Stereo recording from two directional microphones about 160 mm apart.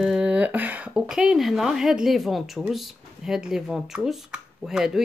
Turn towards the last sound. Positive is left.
turn(degrees=-5)  # may be behind; listen again after turning